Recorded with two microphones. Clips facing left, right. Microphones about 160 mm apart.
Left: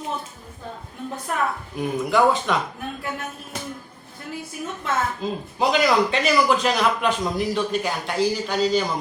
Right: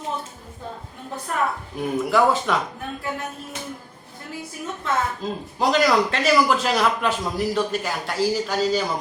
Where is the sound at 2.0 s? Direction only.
5° right (ahead or behind).